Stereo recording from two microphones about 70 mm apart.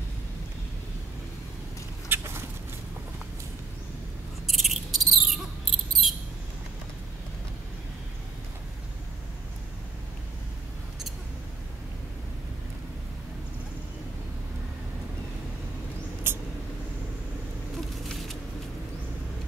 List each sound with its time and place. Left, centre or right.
2.0 s rodents: right
4.5 s cricket: centre
16.3 s vehicle: right
17.7 s a sound: centre